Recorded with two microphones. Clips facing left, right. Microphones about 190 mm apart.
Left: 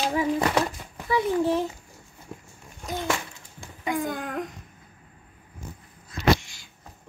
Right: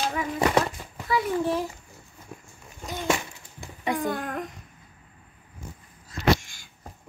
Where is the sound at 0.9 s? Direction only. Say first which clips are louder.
Left 2 dB; 15° left (ahead or behind).